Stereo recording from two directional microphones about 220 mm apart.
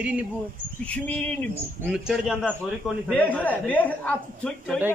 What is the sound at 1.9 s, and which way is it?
A man's voice, 5° right (ahead or behind).